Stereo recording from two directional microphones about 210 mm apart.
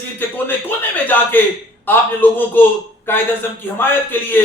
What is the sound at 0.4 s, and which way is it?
A man's voice, 10° left (ahead or behind).